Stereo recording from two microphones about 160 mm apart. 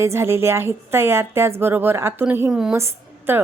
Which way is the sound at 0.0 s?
15° right (ahead or behind).